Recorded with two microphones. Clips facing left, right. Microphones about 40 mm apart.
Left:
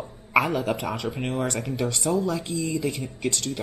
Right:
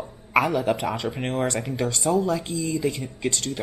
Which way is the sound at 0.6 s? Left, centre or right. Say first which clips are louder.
Right 3 dB; right.